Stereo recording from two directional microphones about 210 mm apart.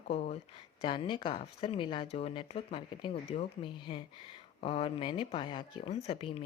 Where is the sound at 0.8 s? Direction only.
25° left (ahead or behind).